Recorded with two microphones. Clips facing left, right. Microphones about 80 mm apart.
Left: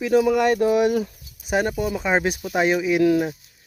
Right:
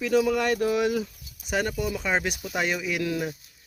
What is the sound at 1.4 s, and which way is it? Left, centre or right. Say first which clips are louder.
Speech: left 5 dB; left.